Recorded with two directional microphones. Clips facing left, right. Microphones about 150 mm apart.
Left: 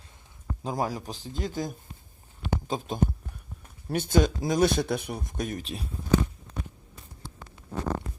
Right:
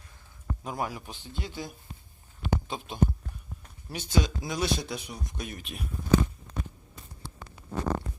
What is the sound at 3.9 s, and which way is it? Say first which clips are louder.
Speech: left 5 dB; 50° left (ahead or behind).